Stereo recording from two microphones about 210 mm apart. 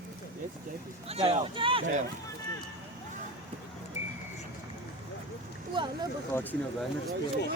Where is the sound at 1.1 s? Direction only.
30° right (ahead or behind).